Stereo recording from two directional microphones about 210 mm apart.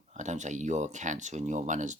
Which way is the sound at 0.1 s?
35° right (ahead or behind).